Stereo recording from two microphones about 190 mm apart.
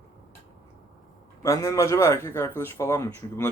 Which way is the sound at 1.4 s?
15° left (ahead or behind).